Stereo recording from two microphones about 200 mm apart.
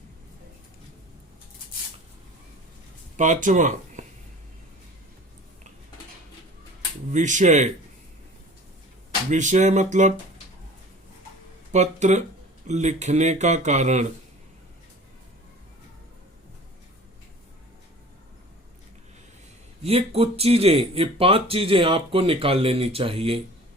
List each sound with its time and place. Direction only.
3.2 s speech: 40° right (ahead or behind)
7.1 s speech: 40° right (ahead or behind)
9.3 s speech: 35° right (ahead or behind)
11.7 s speech: 35° right (ahead or behind)
19.8 s speech: 30° right (ahead or behind)